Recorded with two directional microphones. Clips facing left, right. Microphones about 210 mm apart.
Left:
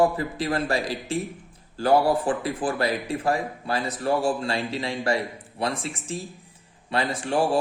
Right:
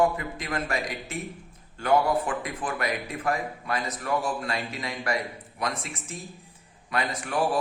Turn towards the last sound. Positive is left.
turn(degrees=30)  # may be behind; listen again after turning